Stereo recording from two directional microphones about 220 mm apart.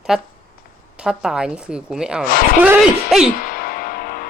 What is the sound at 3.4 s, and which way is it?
Music, 40° left (ahead or behind).